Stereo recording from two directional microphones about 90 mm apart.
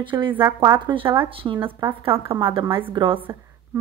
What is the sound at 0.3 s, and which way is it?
Speech, 25° right (ahead or behind).